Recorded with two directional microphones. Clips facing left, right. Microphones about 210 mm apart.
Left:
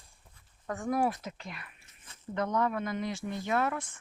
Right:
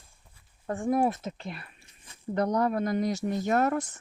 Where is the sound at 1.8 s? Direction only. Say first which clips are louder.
Right 2 dB; 15° right (ahead or behind).